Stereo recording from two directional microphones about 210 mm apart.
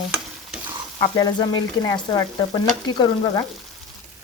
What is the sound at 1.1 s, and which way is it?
Frying, 15° left (ahead or behind).